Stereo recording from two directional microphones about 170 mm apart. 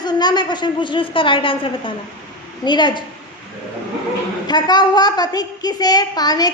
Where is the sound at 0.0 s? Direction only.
25° left (ahead or behind).